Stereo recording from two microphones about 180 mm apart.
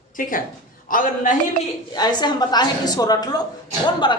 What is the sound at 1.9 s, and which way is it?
A woman's voice, 25° left (ahead or behind).